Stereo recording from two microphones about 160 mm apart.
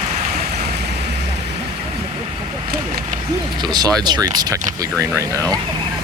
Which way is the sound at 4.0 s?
25° right (ahead or behind).